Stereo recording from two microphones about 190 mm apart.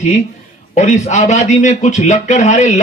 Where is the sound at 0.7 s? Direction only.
35° left (ahead or behind).